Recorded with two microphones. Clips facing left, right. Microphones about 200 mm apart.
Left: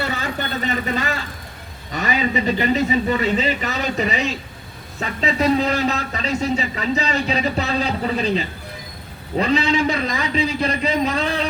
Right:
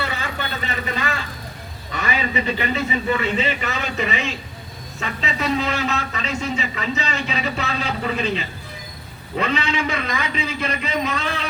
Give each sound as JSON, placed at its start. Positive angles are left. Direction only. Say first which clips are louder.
{"t": 0.0, "sound": "vehicle", "louder": "left 3 dB", "side_deg": 40}
{"t": 1.9, "sound": "a man's voice", "louder": "left 3 dB", "side_deg": 40}